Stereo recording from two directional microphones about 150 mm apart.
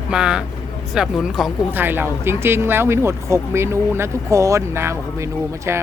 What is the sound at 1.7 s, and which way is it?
Speech, 15° right (ahead or behind).